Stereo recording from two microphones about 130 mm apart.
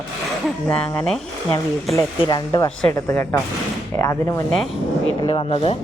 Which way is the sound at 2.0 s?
30° left (ahead or behind).